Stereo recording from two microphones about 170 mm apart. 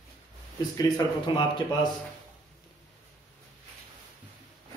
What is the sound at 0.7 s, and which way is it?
A man's voice, 25° left (ahead or behind).